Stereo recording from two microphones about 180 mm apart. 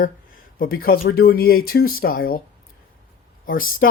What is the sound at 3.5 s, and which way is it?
Speech, 50° left (ahead or behind).